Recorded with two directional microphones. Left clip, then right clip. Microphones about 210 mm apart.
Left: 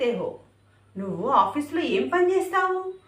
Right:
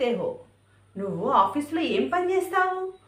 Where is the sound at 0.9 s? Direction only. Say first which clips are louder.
Left 1 dB; 15° right (ahead or behind).